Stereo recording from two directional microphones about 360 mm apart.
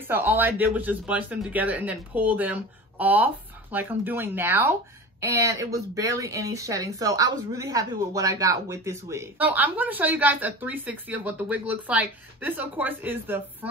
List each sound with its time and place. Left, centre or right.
0.0 s speech: centre